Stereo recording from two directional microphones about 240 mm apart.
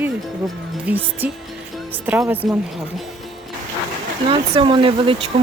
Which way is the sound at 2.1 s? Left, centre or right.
Centre.